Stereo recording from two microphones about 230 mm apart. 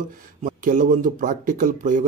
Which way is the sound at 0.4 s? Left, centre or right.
Right.